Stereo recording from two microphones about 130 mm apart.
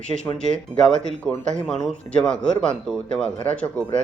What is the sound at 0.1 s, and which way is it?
Speech, 25° left (ahead or behind).